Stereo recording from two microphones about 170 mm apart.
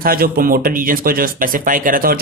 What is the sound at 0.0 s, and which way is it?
Speech, 60° right (ahead or behind).